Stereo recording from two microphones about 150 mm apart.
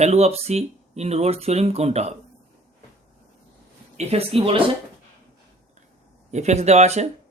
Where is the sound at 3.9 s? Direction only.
45° right (ahead or behind).